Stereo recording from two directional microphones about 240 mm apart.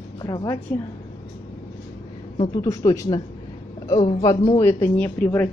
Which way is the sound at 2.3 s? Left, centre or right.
Left.